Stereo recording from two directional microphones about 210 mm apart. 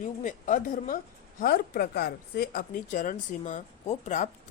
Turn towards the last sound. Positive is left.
turn(degrees=35)  # may be behind; listen again after turning